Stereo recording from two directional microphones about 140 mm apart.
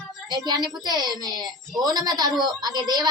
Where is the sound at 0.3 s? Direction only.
30° right (ahead or behind).